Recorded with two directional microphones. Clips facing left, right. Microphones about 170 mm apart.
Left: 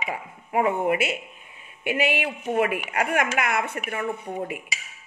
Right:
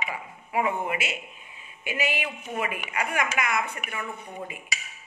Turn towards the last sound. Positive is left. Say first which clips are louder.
# left 7 dB
turn(degrees=60)  # may be behind; listen again after turning